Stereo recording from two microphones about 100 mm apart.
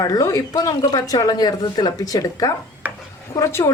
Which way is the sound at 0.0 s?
40° left (ahead or behind).